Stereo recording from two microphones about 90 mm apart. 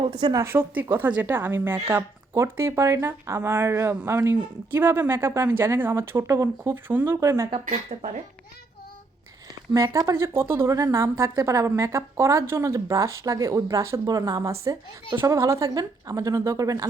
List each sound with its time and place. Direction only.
0.1 s speech: 50° right (ahead or behind)
0.4 s a woman's voice: 20° right (ahead or behind)
7.2 s speech: 35° right (ahead or behind)
9.7 s speech: 35° right (ahead or behind)
15.2 s speech: 35° right (ahead or behind)